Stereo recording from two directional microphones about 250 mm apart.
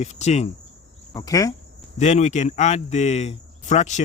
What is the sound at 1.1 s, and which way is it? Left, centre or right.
Cricket, centre.